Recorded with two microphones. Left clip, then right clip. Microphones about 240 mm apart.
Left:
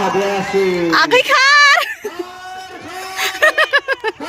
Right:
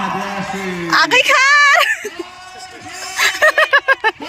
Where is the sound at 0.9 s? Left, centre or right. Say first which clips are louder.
Right 3 dB; centre.